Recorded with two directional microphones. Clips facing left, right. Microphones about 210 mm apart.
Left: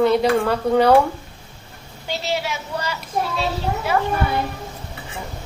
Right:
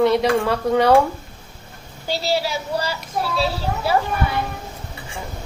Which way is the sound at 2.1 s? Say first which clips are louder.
Right 3 dB; 35° right (ahead or behind).